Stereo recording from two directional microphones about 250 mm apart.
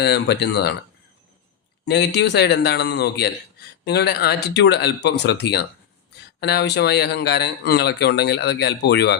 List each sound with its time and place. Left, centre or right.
0.0 s speech: left
1.8 s speech: left